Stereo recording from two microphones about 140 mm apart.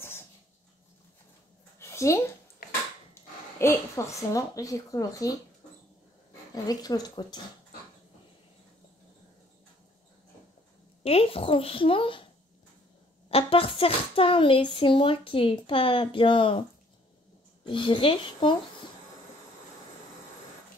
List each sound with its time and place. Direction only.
1.8 s a sound: 20° left (ahead or behind)
3.2 s dog: 15° left (ahead or behind)
3.5 s a woman's voice: 20° left (ahead or behind)
6.5 s a woman's voice: 25° left (ahead or behind)
11.1 s speech: 45° left (ahead or behind)
13.3 s speech: 45° left (ahead or behind)
17.6 s speech: 35° left (ahead or behind)